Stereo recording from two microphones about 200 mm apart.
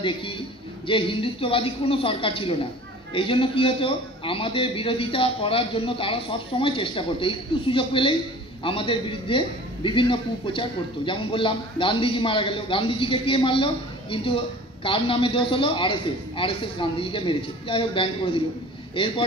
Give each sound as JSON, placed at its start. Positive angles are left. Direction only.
{"t": 0.0, "sound": "a man's voice", "side_deg": 25}